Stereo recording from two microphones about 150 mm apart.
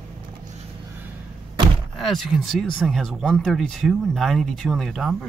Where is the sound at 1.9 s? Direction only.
Centre (ahead or behind).